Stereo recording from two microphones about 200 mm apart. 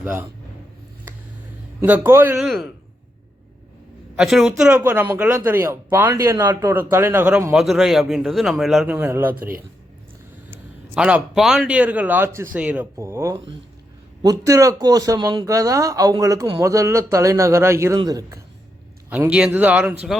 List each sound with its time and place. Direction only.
0.0 s speech: 10° right (ahead or behind)
1.8 s a man's voice: 10° right (ahead or behind)
2.4 s a woman's voice: centre (ahead or behind)
4.2 s a woman's voice: centre (ahead or behind)
10.5 s a man's voice: 5° right (ahead or behind)
19.1 s a man's voice: 5° right (ahead or behind)